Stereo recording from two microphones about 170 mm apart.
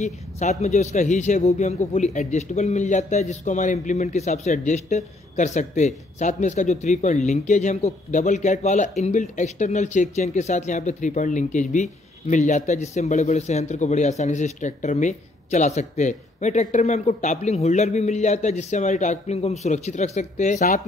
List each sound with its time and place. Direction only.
0.0 s a man's voice: 45° left (ahead or behind)